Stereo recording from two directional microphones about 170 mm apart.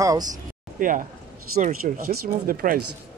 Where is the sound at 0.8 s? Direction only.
50° right (ahead or behind).